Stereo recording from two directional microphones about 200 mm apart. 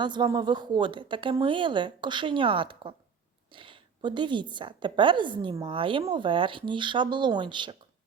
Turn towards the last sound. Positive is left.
turn(degrees=-25)  # may be behind; listen again after turning